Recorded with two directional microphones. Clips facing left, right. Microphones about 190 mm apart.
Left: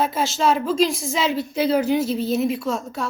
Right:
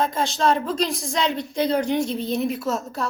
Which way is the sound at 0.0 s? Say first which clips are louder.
Left 1 dB; 5° left (ahead or behind).